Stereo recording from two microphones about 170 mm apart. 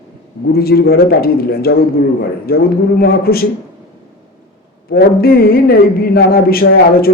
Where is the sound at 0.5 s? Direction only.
65° left (ahead or behind).